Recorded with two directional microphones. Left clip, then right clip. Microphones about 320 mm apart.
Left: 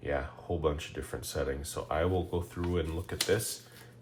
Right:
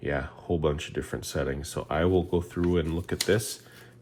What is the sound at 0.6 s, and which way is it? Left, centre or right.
Speech, right.